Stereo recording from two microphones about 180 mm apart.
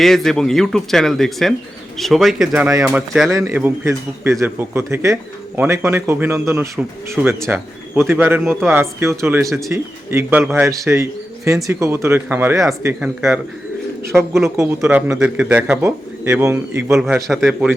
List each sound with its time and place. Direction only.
0.0 s speech: centre (ahead or behind)
17.4 s speech: 10° right (ahead or behind)